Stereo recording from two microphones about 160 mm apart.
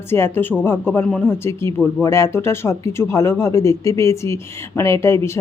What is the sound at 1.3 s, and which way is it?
Speech, 15° left (ahead or behind).